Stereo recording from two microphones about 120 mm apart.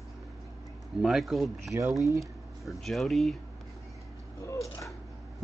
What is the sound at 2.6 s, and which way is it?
Speech, centre (ahead or behind).